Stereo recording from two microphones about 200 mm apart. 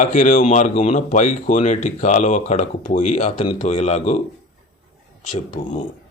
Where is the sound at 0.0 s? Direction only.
40° left (ahead or behind).